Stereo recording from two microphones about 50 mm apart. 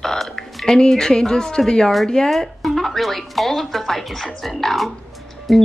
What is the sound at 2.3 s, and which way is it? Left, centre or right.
Speech, centre.